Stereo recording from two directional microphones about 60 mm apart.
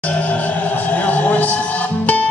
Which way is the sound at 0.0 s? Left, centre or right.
Left.